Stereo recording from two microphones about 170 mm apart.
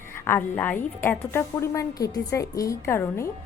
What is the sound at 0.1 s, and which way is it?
A woman's voice, 15° left (ahead or behind).